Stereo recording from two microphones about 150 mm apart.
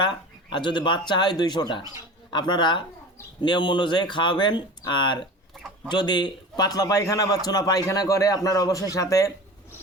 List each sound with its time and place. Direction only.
0.5 s a man's voice: 30° left (ahead or behind)